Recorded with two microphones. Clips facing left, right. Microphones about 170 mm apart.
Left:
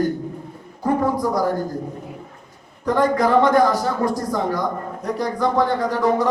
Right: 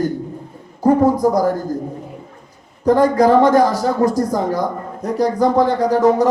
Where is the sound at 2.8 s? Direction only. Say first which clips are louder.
Right 6 dB; 40° right (ahead or behind).